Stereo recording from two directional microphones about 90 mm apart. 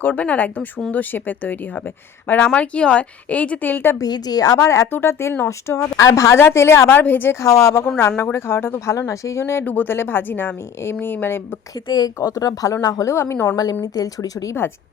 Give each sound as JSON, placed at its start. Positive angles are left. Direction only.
{"t": 0.0, "sound": "a woman's voice", "side_deg": 20}
{"t": 4.0, "sound": "a woman's voice", "side_deg": 45}
{"t": 7.4, "sound": "speech", "side_deg": 35}
{"t": 11.9, "sound": "speech", "side_deg": 50}
{"t": 13.8, "sound": "speech", "side_deg": 45}